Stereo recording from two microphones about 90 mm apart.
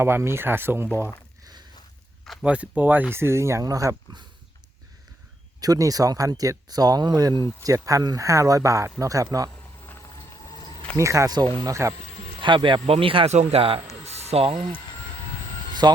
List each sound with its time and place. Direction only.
0.0 s speech: 30° right (ahead or behind)
2.4 s speech: 15° right (ahead or behind); by 3.9 s 40° right (ahead or behind)
5.5 s speech: 45° right (ahead or behind)
9.5 s a sound: 30° left (ahead or behind); by 10.8 s 50° left (ahead or behind)
10.9 s speech: 35° right (ahead or behind)
12.4 s speech: 65° right (ahead or behind); by 14.6 s 90° right
15.8 s speech: 50° right (ahead or behind)